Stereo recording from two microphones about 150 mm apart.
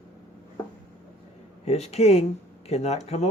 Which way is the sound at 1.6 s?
45° left (ahead or behind).